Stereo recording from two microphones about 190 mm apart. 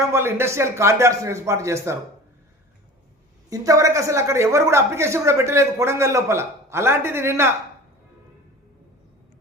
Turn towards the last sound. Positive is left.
turn(degrees=-15)  # may be behind; listen again after turning